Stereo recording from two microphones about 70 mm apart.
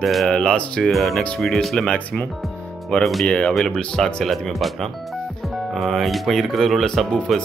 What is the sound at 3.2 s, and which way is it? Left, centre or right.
Speech, centre.